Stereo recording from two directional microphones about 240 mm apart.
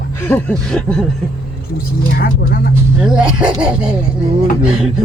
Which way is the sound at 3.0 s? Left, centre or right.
Centre.